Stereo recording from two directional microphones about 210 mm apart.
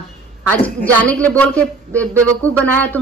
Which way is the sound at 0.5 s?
5° left (ahead or behind).